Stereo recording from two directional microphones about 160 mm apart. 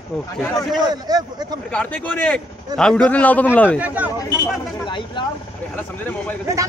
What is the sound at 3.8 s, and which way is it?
Speech, 10° right (ahead or behind).